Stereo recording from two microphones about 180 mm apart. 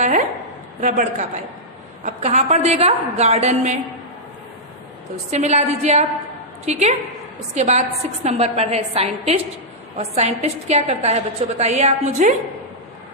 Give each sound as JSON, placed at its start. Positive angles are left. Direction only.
{"t": 0.8, "sound": "a man's voice", "side_deg": -45}
{"t": 5.3, "sound": "a woman's voice", "side_deg": -40}